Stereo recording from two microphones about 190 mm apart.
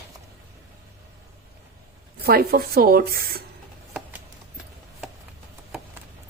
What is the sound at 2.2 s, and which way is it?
Speech, 55° right (ahead or behind).